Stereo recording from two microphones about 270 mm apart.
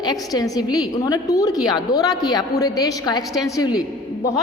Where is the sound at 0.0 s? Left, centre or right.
Centre.